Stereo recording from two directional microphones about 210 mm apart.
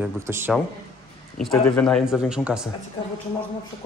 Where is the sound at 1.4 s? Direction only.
Centre (ahead or behind).